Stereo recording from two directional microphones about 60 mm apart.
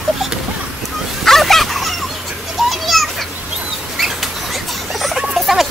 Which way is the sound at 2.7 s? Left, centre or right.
Centre.